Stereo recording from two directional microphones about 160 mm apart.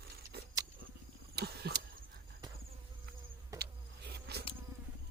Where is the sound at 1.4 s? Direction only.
90° right.